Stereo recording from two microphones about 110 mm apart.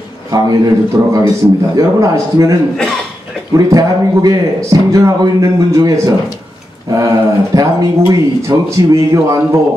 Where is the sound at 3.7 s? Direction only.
35° right (ahead or behind).